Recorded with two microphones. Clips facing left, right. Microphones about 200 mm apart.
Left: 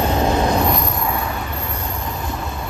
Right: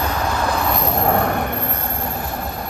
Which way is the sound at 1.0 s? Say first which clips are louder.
Right 6 dB; 60° right (ahead or behind).